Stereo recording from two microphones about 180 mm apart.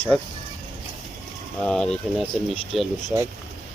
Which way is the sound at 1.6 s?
5° left (ahead or behind).